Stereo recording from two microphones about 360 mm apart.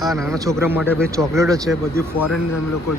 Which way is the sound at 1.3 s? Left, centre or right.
Centre.